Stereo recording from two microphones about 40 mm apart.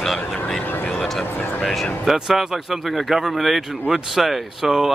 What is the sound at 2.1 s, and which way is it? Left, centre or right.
Speech, centre.